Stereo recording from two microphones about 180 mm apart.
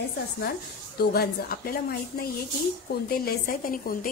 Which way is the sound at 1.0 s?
60° left (ahead or behind).